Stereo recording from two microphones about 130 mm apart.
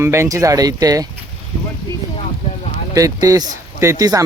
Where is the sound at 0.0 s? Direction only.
20° right (ahead or behind).